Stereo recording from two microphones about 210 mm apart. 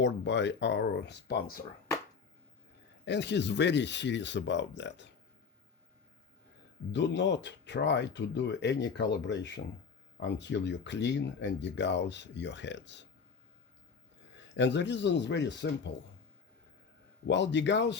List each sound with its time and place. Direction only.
0.0 s speech: 55° left (ahead or behind)
3.0 s speech: 55° left (ahead or behind)
6.9 s speech: 55° left (ahead or behind)
14.5 s speech: 60° left (ahead or behind)
17.2 s speech: 55° left (ahead or behind)